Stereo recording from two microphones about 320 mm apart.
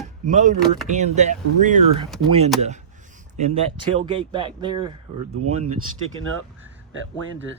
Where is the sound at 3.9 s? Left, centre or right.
Centre.